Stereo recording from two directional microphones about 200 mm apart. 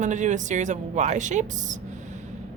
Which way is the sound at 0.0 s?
35° right (ahead or behind).